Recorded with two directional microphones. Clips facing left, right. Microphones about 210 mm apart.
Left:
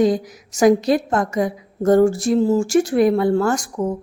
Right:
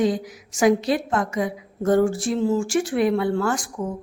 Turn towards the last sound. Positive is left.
turn(degrees=40)  # may be behind; listen again after turning